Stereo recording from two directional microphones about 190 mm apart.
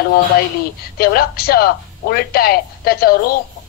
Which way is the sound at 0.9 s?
55° left (ahead or behind).